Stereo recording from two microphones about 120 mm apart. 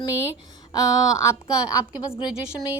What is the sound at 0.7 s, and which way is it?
Speech, 25° left (ahead or behind).